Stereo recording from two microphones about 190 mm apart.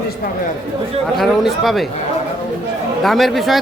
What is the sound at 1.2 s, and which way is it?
Speech, centre (ahead or behind).